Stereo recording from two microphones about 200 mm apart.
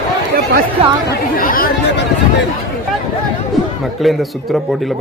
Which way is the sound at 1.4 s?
45° left (ahead or behind).